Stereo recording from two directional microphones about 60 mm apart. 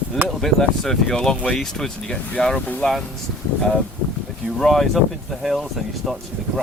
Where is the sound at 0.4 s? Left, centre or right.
Centre.